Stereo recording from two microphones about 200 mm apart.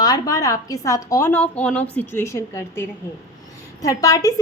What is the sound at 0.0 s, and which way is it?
A woman's voice, 20° left (ahead or behind).